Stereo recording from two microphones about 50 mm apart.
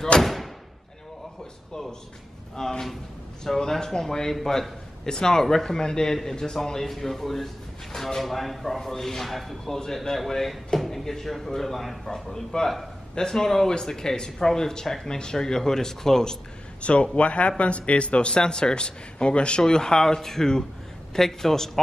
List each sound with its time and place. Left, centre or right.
0.2 s slam: centre
1.7 s speech: centre
16.8 s speech: left